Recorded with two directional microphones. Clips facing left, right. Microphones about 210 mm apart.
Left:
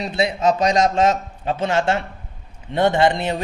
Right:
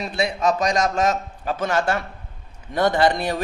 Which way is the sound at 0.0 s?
30° left (ahead or behind).